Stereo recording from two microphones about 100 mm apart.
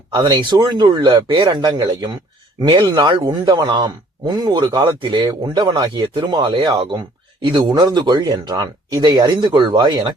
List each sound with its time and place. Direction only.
0.1 s speech: 45° right (ahead or behind)